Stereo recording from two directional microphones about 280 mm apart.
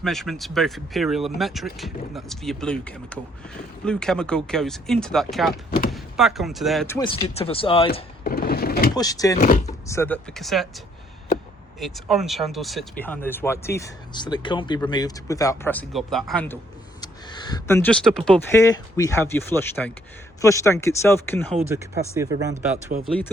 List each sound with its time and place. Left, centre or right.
0.0 s speech: centre
8.2 s a sound: left
9.0 s speech: centre
9.4 s a sound: left
9.8 s speech: centre
11.8 s speech: centre
17.0 s speech: centre
22.1 s speech: centre
22.9 s speech: right